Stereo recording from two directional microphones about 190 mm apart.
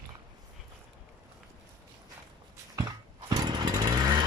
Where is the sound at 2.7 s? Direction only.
20° right (ahead or behind).